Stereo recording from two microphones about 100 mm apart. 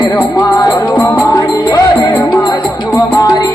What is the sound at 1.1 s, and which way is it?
Speech, 30° left (ahead or behind).